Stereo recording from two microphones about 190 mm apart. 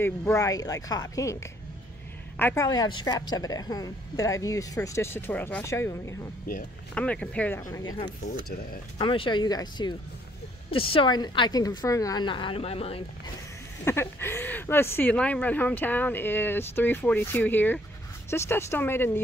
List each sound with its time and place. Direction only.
0.0 s speech: 15° left (ahead or behind)
7.7 s a woman's voice: 20° left (ahead or behind)
13.8 s speech: 10° left (ahead or behind)